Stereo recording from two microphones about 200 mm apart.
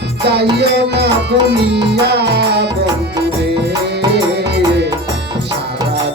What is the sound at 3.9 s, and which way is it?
Music, 55° right (ahead or behind).